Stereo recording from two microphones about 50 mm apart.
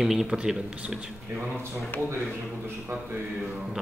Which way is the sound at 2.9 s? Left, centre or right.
Right.